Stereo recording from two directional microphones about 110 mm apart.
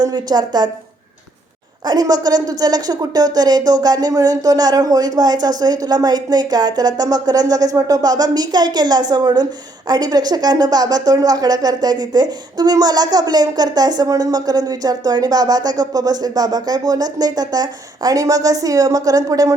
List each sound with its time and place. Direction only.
0.0 s a woman's voice: 40° right (ahead or behind)
1.8 s a woman's voice: 40° right (ahead or behind)